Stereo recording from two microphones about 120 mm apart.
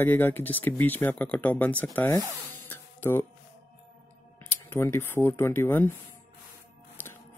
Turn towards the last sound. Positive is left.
turn(degrees=15)  # may be behind; listen again after turning